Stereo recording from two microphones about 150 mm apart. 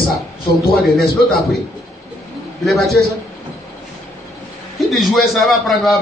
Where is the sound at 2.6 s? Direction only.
Centre (ahead or behind).